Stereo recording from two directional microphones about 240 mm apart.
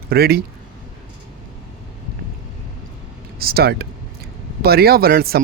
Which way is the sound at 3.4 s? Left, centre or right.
Right.